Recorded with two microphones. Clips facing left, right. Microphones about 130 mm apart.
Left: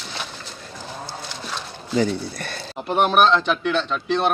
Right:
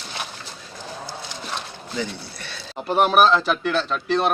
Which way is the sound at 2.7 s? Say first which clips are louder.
Right 1 dB; centre (ahead or behind).